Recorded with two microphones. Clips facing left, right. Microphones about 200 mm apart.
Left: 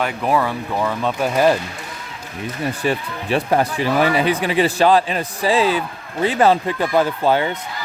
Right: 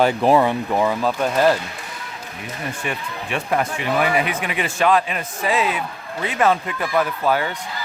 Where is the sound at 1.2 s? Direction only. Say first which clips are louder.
Left 1 dB; 5° left (ahead or behind).